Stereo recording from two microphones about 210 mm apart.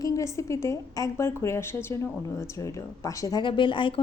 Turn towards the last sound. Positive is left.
turn(degrees=25)  # may be behind; listen again after turning